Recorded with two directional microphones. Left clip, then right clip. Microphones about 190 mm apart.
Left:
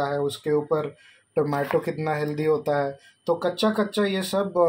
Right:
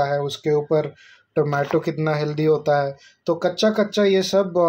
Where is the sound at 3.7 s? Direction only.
40° right (ahead or behind).